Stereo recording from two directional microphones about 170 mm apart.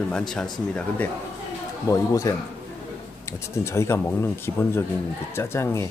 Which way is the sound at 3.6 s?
15° left (ahead or behind).